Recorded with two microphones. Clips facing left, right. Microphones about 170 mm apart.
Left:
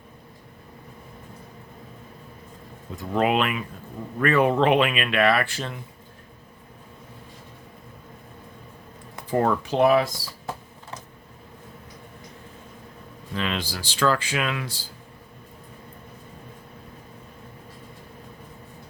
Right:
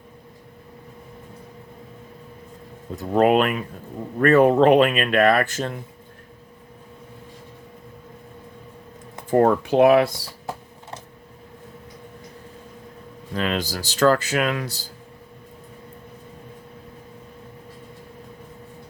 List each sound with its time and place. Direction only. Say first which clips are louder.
2.9 s speech: right 5 dB; 40° right (ahead or behind)
9.3 s speech: right 5 dB; 50° right (ahead or behind)
13.3 s speech: right 4 dB; 45° right (ahead or behind)